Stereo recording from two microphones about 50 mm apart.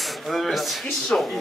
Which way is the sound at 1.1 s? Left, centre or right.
Centre.